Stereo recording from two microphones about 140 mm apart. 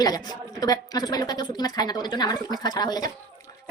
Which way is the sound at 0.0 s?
30° left (ahead or behind).